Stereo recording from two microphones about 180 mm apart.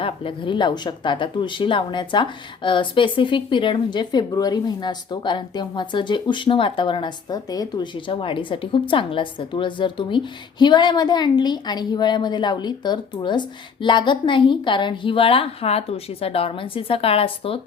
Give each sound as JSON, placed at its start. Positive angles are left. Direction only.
{"t": 0.0, "sound": "a woman's voice", "side_deg": 30}